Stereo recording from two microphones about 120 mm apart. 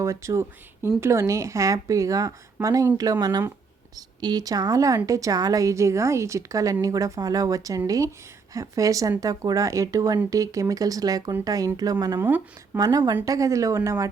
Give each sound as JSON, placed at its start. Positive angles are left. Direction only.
{"t": 0.0, "sound": "speech", "side_deg": -25}